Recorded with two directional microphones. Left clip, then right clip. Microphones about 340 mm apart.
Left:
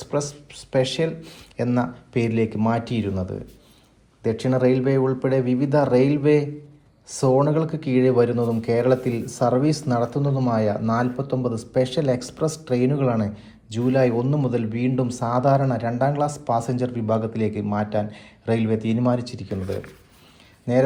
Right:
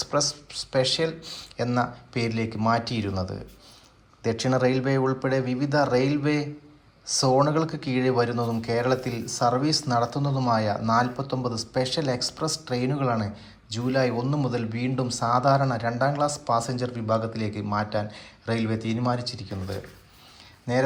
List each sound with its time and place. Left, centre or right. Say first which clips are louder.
0.0 s speech: right 1 dB; centre